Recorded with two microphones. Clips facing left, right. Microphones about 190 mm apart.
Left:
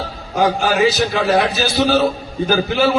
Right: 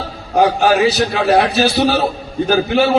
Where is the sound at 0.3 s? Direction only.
65° right (ahead or behind).